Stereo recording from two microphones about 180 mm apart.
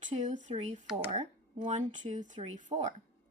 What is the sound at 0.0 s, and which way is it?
Speech, 40° right (ahead or behind).